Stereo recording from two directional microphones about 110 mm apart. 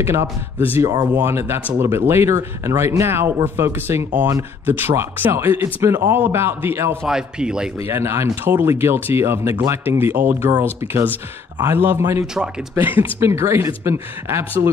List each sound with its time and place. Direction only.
0.0 s speech: 25° right (ahead or behind)
7.1 s a man's voice: 5° right (ahead or behind)
7.9 s speech: 25° right (ahead or behind)